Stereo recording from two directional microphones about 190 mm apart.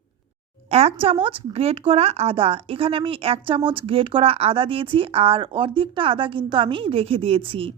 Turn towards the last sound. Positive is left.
turn(degrees=-30)  # may be behind; listen again after turning